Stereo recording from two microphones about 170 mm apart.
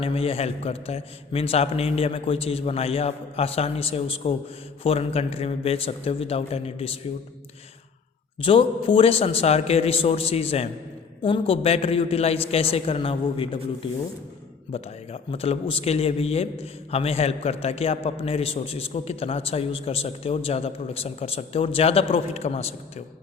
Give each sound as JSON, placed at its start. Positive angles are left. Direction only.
{"t": 0.0, "sound": "a man's voice", "side_deg": 35}
{"t": 8.4, "sound": "a man's voice", "side_deg": 30}
{"t": 14.7, "sound": "a man's voice", "side_deg": 35}